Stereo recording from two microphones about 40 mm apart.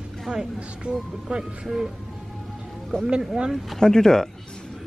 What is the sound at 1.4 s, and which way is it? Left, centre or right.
Speech, centre.